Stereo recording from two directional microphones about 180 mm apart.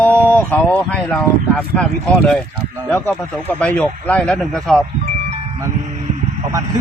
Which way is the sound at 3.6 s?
10° left (ahead or behind).